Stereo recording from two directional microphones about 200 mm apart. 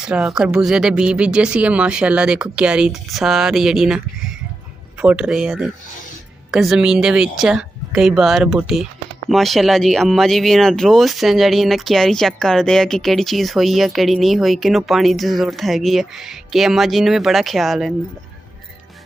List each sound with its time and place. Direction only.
0.0 s speech: 5° right (ahead or behind)